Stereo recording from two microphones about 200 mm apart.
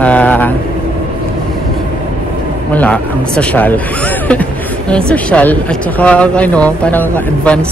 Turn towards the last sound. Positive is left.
turn(degrees=5)  # may be behind; listen again after turning